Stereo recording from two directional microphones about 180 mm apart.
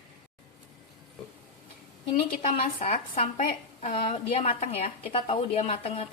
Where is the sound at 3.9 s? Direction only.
35° left (ahead or behind).